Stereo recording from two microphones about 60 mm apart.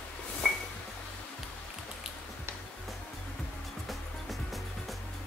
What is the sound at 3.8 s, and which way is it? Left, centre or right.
Music, centre.